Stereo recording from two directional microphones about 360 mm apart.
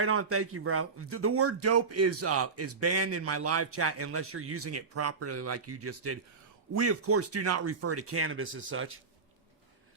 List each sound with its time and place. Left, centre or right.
0.0 s speech: right